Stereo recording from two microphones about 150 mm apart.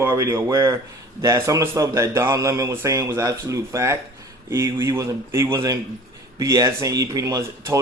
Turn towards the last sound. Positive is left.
turn(degrees=-20)  # may be behind; listen again after turning